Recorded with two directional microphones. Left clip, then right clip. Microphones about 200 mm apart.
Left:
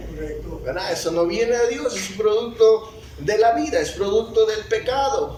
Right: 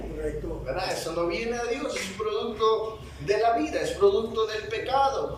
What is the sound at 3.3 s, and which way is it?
A man's voice, 35° left (ahead or behind).